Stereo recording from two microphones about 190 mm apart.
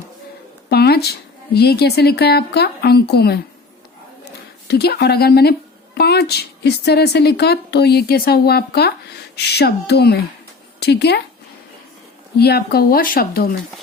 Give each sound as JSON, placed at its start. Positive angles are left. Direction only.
{"t": 0.7, "sound": "a sound", "side_deg": 55}
{"t": 1.5, "sound": "speech", "side_deg": 60}
{"t": 4.7, "sound": "speech", "side_deg": 60}
{"t": 12.4, "sound": "speech", "side_deg": 55}